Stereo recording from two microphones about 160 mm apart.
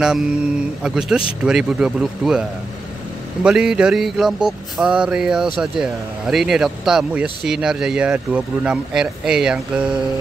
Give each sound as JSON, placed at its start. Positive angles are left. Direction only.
{"t": 0.0, "sound": "speech", "side_deg": -5}
{"t": 3.4, "sound": "speech", "side_deg": -5}